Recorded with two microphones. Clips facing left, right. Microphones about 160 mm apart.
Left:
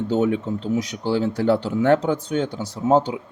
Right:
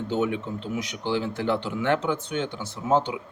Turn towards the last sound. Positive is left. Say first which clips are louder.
# left 5 dB
turn(degrees=35)  # may be behind; listen again after turning